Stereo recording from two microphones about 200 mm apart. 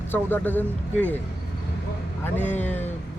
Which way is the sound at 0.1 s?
10° left (ahead or behind).